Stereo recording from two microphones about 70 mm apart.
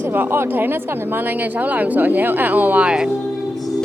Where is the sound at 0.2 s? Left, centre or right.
Right.